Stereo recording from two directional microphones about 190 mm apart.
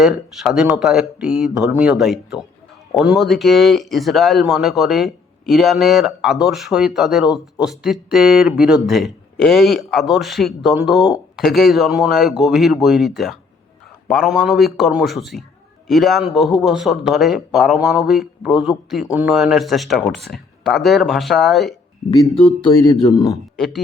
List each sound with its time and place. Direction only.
0.0 s speech: centre (ahead or behind)
22.8 s speech: 20° left (ahead or behind)
23.6 s speech: centre (ahead or behind)